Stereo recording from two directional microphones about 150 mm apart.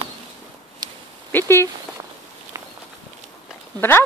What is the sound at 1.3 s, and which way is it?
Speech, 15° left (ahead or behind).